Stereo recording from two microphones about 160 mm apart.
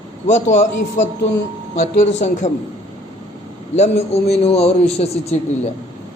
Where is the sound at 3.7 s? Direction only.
45° left (ahead or behind).